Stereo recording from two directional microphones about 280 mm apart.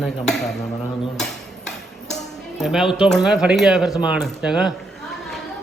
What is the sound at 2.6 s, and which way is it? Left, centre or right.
A man's voice, centre.